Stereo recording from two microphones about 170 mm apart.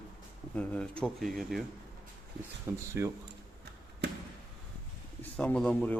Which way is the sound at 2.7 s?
15° right (ahead or behind).